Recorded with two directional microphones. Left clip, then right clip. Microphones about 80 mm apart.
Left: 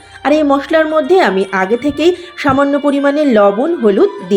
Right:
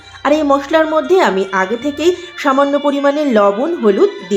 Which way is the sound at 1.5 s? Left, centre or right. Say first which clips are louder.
Left 2 dB; left.